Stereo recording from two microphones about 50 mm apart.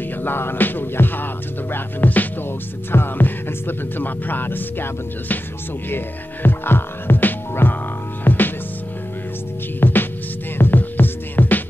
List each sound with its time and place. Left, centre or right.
0.2 s music: left
5.9 s speech: left
8.2 s music: left
9.8 s music: left